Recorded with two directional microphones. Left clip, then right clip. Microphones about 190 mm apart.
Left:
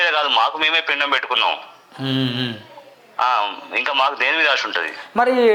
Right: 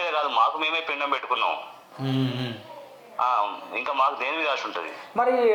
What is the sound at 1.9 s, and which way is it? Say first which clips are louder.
Speech: left 7 dB; 35° left (ahead or behind).